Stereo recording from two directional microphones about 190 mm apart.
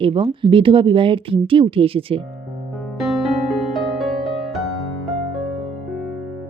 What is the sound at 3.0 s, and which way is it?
Music, centre (ahead or behind).